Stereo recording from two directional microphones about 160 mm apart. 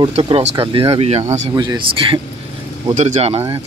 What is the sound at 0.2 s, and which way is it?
Speech, 35° right (ahead or behind).